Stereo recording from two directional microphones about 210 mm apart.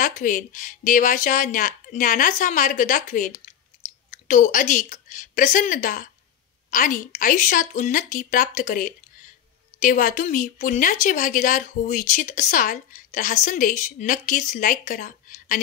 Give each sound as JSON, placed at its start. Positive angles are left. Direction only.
{"t": 0.0, "sound": "a woman's voice", "side_deg": 40}